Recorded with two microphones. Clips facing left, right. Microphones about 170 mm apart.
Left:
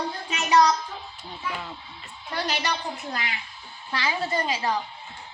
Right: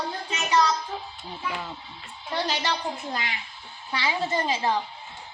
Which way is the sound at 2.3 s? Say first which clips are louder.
Right 1 dB; 25° right (ahead or behind).